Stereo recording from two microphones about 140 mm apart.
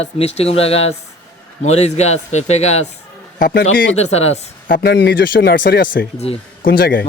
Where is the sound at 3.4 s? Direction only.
85° left.